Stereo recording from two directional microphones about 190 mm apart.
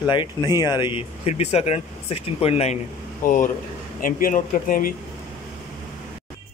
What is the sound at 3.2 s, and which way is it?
Speech, 45° left (ahead or behind).